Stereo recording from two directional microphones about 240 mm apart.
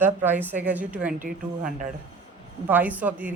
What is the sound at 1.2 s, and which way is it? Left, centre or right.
Speech, right.